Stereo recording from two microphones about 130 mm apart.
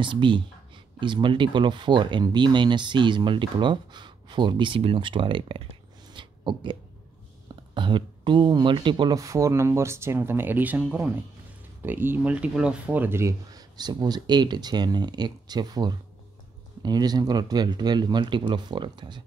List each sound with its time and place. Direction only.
0.0 s speech: 40° right (ahead or behind)